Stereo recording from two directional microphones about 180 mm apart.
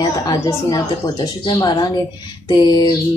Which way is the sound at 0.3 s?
20° left (ahead or behind).